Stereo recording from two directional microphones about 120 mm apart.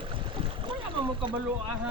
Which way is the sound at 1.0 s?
45° right (ahead or behind).